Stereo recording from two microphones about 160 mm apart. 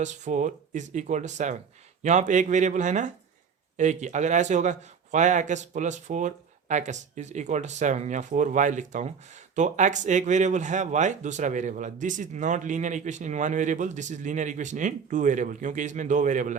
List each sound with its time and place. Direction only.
0.0 s speech: 45° right (ahead or behind)